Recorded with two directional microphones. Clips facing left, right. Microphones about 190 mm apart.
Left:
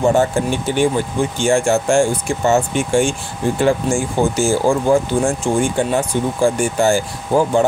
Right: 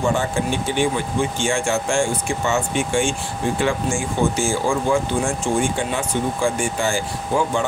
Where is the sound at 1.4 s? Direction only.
40° left (ahead or behind).